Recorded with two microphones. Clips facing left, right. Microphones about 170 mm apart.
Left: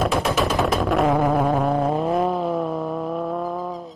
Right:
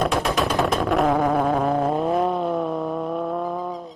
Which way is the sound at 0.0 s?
Centre (ahead or behind).